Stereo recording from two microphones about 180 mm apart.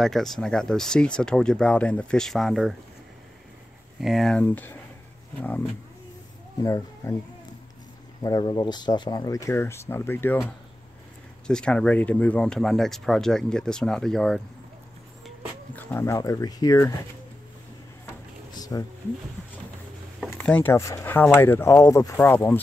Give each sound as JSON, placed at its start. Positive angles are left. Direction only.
{"t": 0.0, "sound": "speech", "side_deg": 0}
{"t": 4.0, "sound": "speech", "side_deg": 0}
{"t": 6.6, "sound": "speech", "side_deg": 15}
{"t": 8.2, "sound": "speech", "side_deg": 25}
{"t": 11.4, "sound": "speech", "side_deg": 5}
{"t": 18.5, "sound": "a sound", "side_deg": 20}
{"t": 20.2, "sound": "speech", "side_deg": 10}